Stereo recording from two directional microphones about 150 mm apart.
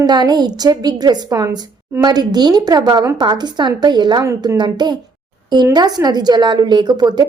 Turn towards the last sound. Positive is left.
turn(degrees=-30)  # may be behind; listen again after turning